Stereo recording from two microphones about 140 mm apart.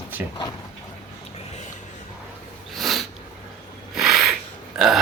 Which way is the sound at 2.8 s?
Centre (ahead or behind).